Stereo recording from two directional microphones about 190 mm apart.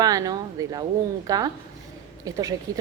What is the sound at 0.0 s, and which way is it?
A woman's voice, 20° right (ahead or behind).